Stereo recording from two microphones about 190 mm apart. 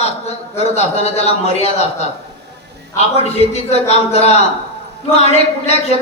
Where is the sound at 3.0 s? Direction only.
35° left (ahead or behind).